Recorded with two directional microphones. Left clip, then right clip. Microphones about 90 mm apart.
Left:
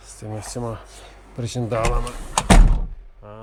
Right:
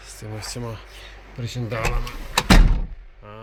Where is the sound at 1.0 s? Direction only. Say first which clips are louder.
Left 3 dB; 90° left.